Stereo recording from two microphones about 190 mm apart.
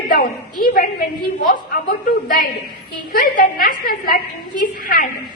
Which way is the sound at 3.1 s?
50° left (ahead or behind).